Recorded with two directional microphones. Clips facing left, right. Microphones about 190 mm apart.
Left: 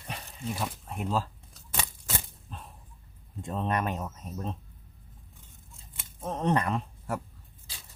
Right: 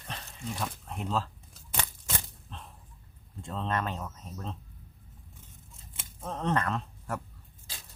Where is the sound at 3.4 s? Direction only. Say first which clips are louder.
Left 2 dB; 15° left (ahead or behind).